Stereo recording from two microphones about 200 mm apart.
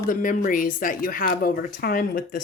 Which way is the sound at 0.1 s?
45° left (ahead or behind).